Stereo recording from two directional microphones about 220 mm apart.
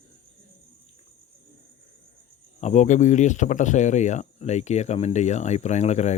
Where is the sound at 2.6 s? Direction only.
30° left (ahead or behind).